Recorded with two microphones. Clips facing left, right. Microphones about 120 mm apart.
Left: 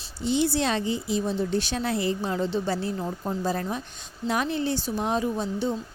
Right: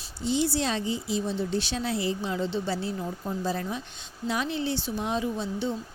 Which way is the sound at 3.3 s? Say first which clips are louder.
Left 2 dB; 50° left (ahead or behind).